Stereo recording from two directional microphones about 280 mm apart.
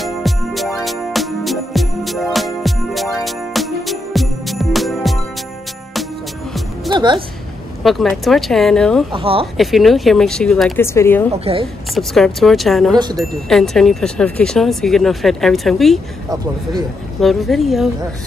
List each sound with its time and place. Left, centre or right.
0.0 s music: centre
6.9 s music: centre
7.8 s speech: centre
9.1 s speech: centre
9.6 s speech: centre
11.3 s speech: right
11.9 s speech: centre
17.2 s speech: centre